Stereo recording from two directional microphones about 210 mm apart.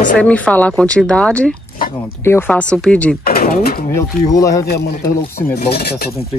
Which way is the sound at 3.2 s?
45° left (ahead or behind).